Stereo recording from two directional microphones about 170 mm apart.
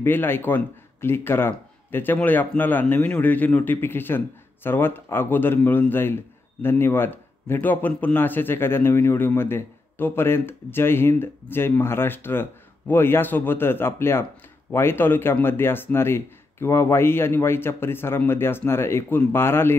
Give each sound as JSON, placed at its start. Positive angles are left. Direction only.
{"t": 0.0, "sound": "a man's voice", "side_deg": 10}